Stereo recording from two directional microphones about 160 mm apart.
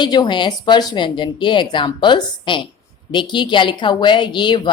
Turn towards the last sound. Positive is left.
turn(degrees=30)  # may be behind; listen again after turning